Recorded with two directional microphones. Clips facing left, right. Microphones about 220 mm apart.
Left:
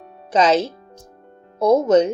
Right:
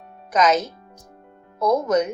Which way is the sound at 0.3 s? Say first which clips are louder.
Left 3 dB; 30° left (ahead or behind).